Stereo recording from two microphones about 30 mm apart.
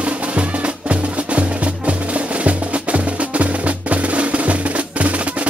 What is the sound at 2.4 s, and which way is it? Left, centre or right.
Percussion, right.